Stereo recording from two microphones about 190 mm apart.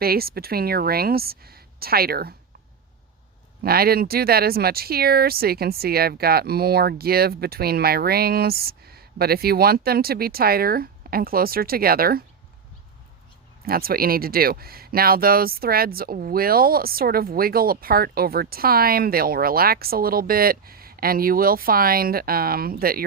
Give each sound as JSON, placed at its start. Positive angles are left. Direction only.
{"t": 0.0, "sound": "speech", "side_deg": -55}
{"t": 3.6, "sound": "speech", "side_deg": -50}
{"t": 13.7, "sound": "speech", "side_deg": -50}